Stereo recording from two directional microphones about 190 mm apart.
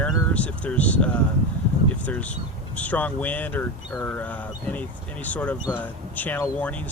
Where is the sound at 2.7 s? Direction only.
10° left (ahead or behind).